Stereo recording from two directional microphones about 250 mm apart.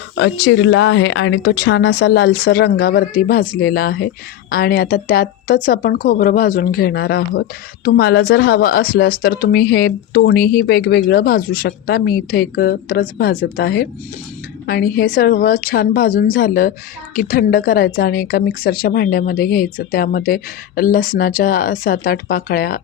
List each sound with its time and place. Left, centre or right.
0.2 s speech: left